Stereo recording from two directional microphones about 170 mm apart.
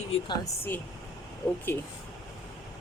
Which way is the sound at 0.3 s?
15° left (ahead or behind).